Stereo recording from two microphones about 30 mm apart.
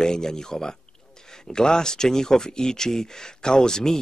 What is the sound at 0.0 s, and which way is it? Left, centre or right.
Speech, left.